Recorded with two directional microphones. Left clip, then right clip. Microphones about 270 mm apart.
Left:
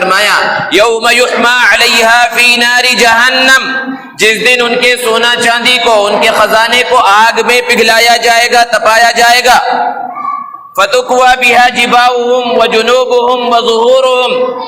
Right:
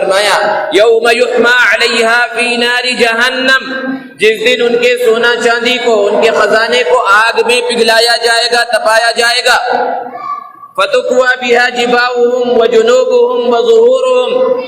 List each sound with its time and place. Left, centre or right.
0.1 s a man's voice: left
10.8 s a man's voice: left